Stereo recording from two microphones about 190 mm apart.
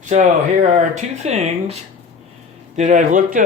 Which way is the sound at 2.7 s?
45° right (ahead or behind).